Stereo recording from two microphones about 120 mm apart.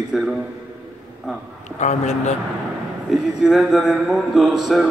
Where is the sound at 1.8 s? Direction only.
75° left (ahead or behind).